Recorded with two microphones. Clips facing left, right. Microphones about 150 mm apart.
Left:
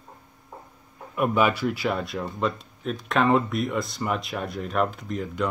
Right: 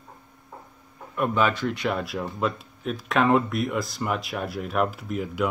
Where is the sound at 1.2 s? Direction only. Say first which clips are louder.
Left 1 dB; 10° left (ahead or behind); by 5.4 s 5° right (ahead or behind).